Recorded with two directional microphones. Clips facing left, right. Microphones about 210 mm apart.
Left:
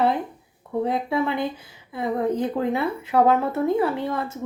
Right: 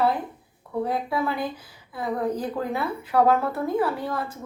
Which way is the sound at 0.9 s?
25° left (ahead or behind).